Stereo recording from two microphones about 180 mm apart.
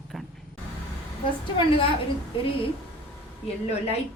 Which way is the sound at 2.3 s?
30° left (ahead or behind).